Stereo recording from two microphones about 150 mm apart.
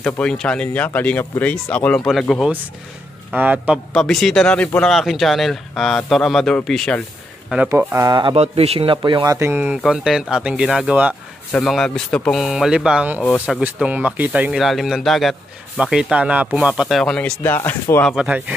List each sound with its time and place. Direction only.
0.0 s speech: 5° left (ahead or behind)
3.3 s speech: 10° right (ahead or behind)
3.9 s speech: 5° left (ahead or behind)
7.4 s speech: 5° right (ahead or behind); by 8.4 s 30° right (ahead or behind)
8.4 s speech: 40° right (ahead or behind); by 11.1 s 10° right (ahead or behind)
11.5 s speech: centre (ahead or behind)
17.4 s speech: 15° left (ahead or behind)
18.1 s speech: 5° right (ahead or behind)